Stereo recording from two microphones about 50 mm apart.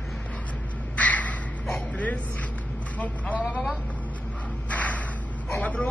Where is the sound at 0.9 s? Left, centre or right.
Left.